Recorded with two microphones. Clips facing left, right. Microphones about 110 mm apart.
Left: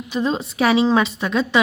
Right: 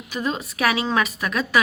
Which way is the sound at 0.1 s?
30° left (ahead or behind).